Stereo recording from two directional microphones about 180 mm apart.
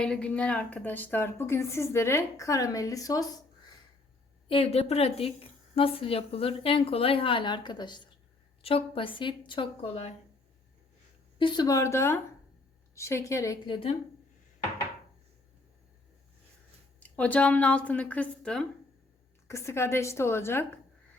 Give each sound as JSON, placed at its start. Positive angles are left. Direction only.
{"t": 0.0, "sound": "a woman's voice", "side_deg": 5}
{"t": 4.4, "sound": "a woman's voice", "side_deg": 30}
{"t": 11.3, "sound": "a woman's voice", "side_deg": 25}
{"t": 17.0, "sound": "a woman's voice", "side_deg": 10}